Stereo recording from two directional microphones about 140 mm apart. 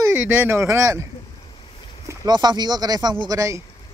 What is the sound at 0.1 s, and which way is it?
Speech, 10° right (ahead or behind).